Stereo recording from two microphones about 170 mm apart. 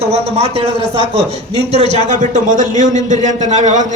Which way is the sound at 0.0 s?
35° right (ahead or behind).